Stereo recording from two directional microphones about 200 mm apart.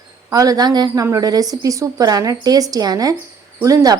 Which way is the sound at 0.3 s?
15° right (ahead or behind).